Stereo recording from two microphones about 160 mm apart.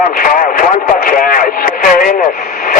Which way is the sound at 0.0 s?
60° left (ahead or behind).